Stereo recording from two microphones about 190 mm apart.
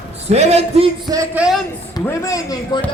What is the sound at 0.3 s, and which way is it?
Speech, 35° right (ahead or behind).